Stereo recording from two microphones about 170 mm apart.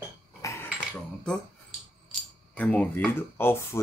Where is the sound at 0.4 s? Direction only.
15° left (ahead or behind).